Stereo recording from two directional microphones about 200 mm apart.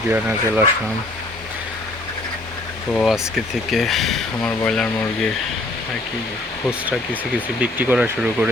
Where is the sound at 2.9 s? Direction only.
Centre (ahead or behind).